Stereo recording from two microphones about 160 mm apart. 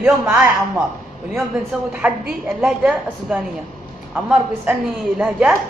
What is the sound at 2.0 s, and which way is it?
A man's voice, 10° right (ahead or behind).